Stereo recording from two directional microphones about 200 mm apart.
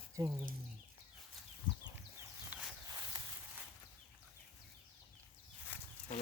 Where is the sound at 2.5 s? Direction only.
10° right (ahead or behind).